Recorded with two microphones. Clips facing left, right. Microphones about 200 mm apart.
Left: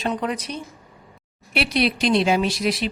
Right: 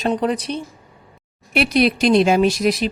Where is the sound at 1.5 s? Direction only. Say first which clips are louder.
Right 5 dB; 45° right (ahead or behind).